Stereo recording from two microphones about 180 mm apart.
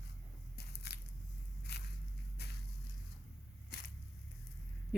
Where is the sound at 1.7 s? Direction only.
65° left (ahead or behind).